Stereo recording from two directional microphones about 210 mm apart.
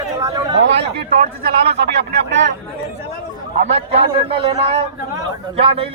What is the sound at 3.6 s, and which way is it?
A man's voice, 30° right (ahead or behind).